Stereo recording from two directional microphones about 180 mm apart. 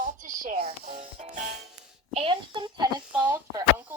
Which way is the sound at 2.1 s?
30° right (ahead or behind).